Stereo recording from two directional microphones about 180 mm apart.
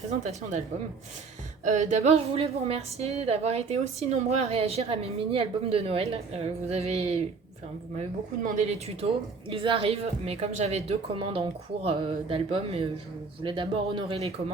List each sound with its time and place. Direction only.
0.1 s a woman's voice: 35° right (ahead or behind)
1.6 s a woman's voice: 40° right (ahead or behind)
8.4 s a woman's voice: 40° right (ahead or behind)